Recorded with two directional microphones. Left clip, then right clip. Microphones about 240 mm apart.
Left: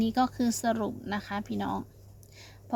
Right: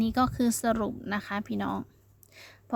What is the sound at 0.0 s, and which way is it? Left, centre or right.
Speech, right.